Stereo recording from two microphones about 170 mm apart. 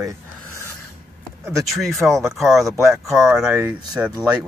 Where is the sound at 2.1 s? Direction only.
15° right (ahead or behind).